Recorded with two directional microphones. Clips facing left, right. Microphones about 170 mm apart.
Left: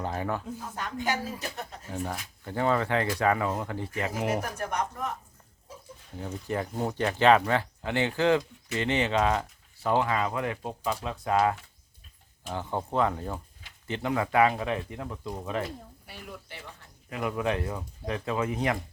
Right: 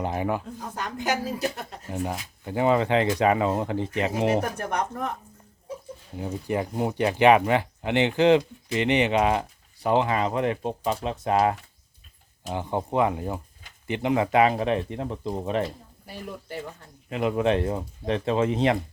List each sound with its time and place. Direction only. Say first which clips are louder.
0.0 s speech: right 4 dB; 15° right (ahead or behind)
0.9 s speech: right 4 dB; 80° right
1.9 s speech: right 5 dB; 20° right (ahead or behind)
4.4 s speech: right 4 dB; 60° right (ahead or behind)
6.1 s speech: right 4 dB; 15° right (ahead or behind)
12.5 s speech: right 4 dB; 15° right (ahead or behind)
16.0 s speech: right 9 dB; 40° right (ahead or behind)
17.1 s speech: right 6 dB; 25° right (ahead or behind)